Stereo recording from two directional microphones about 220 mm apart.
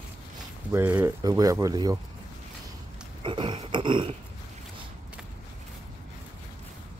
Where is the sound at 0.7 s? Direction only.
10° right (ahead or behind).